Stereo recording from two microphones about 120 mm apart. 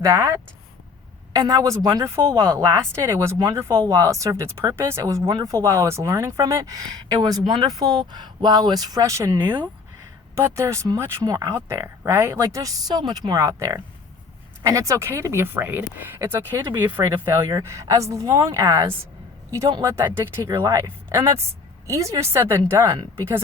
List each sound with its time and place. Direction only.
0.0 s a man's voice: 25° right (ahead or behind)